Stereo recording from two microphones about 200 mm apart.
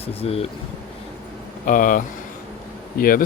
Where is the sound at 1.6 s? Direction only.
40° left (ahead or behind).